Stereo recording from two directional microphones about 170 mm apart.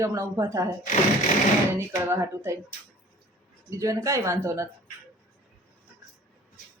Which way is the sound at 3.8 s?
20° right (ahead or behind).